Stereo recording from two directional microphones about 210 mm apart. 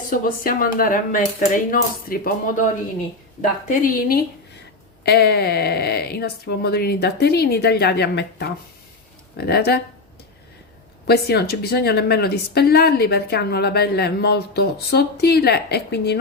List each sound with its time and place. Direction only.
0.1 s speech: 40° left (ahead or behind)
3.7 s speech: 45° left (ahead or behind)
11.0 s speech: 50° left (ahead or behind)